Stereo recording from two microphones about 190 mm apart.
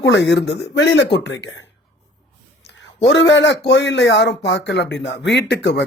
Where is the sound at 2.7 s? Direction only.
75° left (ahead or behind).